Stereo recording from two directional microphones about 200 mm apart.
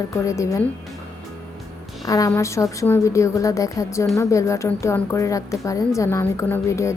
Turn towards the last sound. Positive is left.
turn(degrees=15)  # may be behind; listen again after turning